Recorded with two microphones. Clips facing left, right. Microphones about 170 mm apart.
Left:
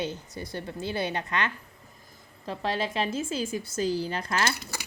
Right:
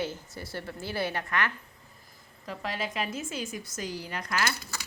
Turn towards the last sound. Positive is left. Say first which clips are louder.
# left 3 dB
turn(degrees=25)  # may be behind; listen again after turning